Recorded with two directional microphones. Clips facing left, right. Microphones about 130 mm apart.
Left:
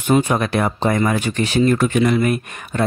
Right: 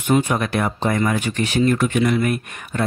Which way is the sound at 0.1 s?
30° left (ahead or behind).